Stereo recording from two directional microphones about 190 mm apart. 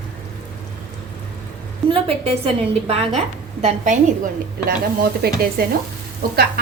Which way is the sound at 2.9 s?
30° right (ahead or behind).